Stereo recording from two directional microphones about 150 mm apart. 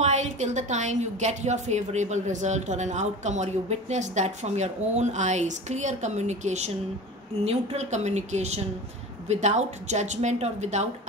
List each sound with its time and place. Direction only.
0.0 s a woman's voice: 50° right (ahead or behind)